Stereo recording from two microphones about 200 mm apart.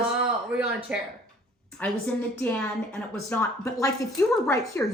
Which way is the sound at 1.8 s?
10° left (ahead or behind).